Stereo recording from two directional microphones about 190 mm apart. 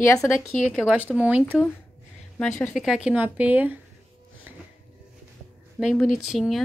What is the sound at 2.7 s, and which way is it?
Speech, centre (ahead or behind).